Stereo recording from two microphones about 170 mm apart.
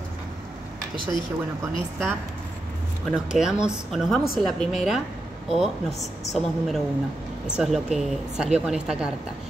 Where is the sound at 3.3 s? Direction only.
5° right (ahead or behind).